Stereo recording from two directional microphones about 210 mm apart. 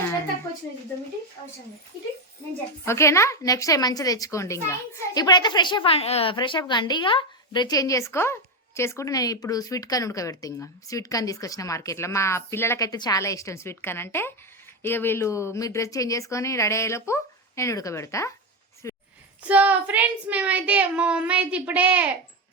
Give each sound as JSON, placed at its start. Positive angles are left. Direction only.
{"t": 2.8, "sound": "a woman's voice", "side_deg": 15}
{"t": 18.8, "sound": "a sound", "side_deg": 15}
{"t": 19.5, "sound": "speech", "side_deg": -5}